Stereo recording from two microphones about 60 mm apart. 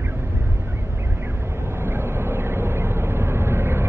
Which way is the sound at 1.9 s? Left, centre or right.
Right.